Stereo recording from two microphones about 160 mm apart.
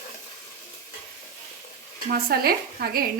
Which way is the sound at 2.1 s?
70° right (ahead or behind).